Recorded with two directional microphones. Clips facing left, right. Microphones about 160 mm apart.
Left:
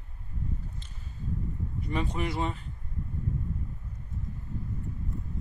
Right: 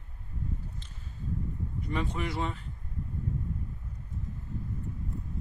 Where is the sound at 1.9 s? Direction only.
15° left (ahead or behind).